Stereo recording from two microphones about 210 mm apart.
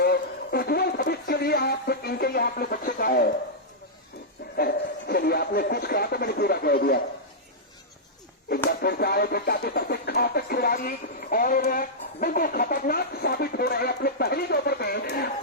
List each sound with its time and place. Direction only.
0.0 s speech: 45° left (ahead or behind)
4.5 s speech: 45° left (ahead or behind)
8.8 s speech: 50° left (ahead or behind)